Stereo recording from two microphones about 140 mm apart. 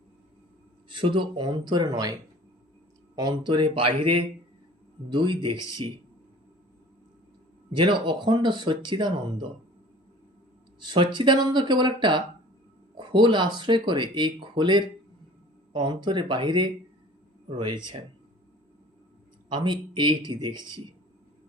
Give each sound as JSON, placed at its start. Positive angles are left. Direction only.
{"t": 0.9, "sound": "speech", "side_deg": -35}
{"t": 3.2, "sound": "speech", "side_deg": -30}
{"t": 7.7, "sound": "speech", "side_deg": -35}
{"t": 10.8, "sound": "speech", "side_deg": -35}
{"t": 19.5, "sound": "speech", "side_deg": -35}